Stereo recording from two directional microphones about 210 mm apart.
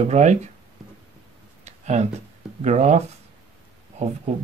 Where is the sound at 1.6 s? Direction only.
35° right (ahead or behind).